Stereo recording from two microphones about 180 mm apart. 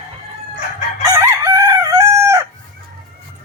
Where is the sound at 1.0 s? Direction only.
15° right (ahead or behind).